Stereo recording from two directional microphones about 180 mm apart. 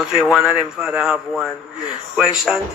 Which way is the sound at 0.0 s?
5° right (ahead or behind).